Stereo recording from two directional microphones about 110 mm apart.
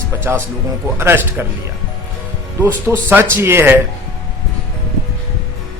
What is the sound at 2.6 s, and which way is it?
Speech, 20° right (ahead or behind).